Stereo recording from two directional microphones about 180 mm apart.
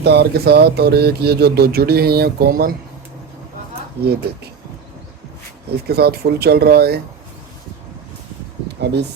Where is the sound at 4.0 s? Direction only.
65° right (ahead or behind).